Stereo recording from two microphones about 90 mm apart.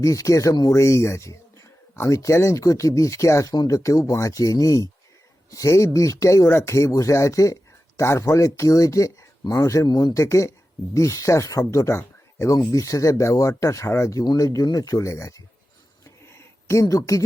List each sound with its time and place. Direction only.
0.0 s speech: 40° left (ahead or behind)
16.0 s a sound: 30° left (ahead or behind)
16.8 s speech: 40° left (ahead or behind)